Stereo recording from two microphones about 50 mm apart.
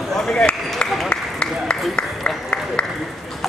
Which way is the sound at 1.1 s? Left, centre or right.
Left.